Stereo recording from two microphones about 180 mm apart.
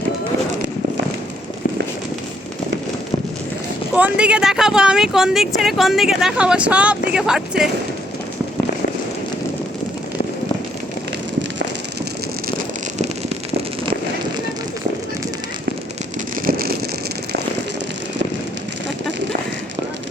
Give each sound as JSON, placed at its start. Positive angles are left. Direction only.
{"t": 3.9, "sound": "speech", "side_deg": -5}
{"t": 16.3, "sound": "vehicle", "side_deg": -55}